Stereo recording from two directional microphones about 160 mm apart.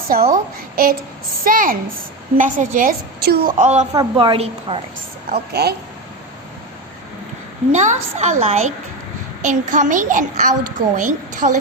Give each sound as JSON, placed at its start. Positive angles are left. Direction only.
{"t": 0.1, "sound": "a woman's voice", "side_deg": -65}
{"t": 1.5, "sound": "a woman's voice", "side_deg": -60}
{"t": 3.2, "sound": "a woman's voice", "side_deg": -80}
{"t": 3.6, "sound": "a child's voice", "side_deg": -45}
{"t": 4.2, "sound": "a woman's voice", "side_deg": -35}
{"t": 5.3, "sound": "a woman's voice", "side_deg": -85}
{"t": 7.7, "sound": "a child's voice", "side_deg": -45}